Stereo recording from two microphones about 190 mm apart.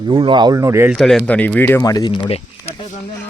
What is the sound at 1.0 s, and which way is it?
Speech, 5° left (ahead or behind).